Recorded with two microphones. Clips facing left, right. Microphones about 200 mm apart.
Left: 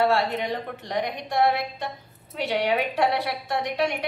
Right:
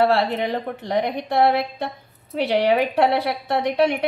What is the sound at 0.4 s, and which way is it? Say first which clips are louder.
A woman's voice: right 5 dB; 60° right (ahead or behind).